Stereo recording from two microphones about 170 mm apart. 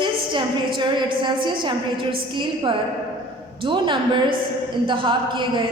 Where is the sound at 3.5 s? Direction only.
30° right (ahead or behind).